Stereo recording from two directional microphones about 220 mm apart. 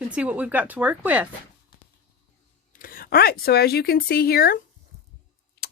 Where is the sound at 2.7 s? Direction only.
40° left (ahead or behind).